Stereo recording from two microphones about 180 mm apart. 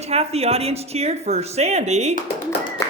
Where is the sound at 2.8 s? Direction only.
15° left (ahead or behind).